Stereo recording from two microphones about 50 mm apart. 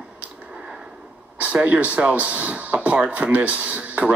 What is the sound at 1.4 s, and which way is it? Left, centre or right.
Speech, right.